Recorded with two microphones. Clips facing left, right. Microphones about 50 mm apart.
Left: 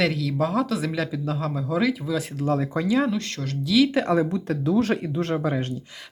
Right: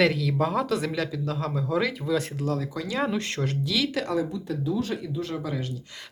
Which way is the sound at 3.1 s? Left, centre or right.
Right.